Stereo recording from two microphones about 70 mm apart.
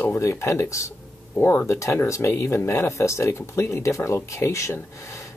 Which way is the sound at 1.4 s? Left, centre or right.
Left.